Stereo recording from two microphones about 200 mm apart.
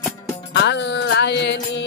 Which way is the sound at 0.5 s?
60° left (ahead or behind).